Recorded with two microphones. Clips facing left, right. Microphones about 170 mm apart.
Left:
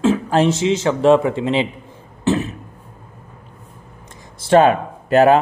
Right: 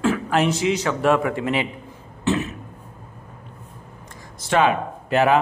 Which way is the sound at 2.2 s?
35° left (ahead or behind).